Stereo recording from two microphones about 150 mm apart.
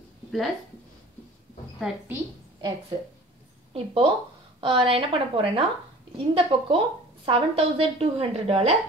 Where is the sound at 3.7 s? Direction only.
35° right (ahead or behind).